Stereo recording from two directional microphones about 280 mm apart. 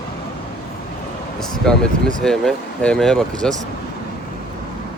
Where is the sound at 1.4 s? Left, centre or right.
Centre.